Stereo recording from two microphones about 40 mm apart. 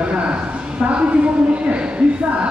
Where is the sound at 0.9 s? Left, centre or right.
Right.